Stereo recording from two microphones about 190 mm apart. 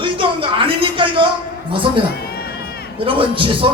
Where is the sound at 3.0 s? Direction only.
30° right (ahead or behind).